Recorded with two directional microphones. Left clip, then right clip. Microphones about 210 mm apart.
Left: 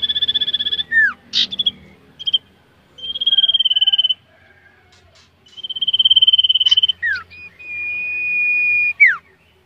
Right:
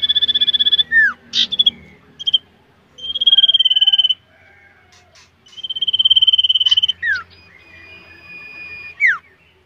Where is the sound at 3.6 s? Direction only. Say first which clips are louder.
Right 2 dB; 30° right (ahead or behind).